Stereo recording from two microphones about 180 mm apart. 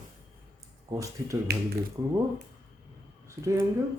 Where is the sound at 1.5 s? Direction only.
65° right (ahead or behind).